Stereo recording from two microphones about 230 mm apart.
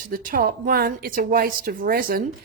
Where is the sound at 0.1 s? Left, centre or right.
Right.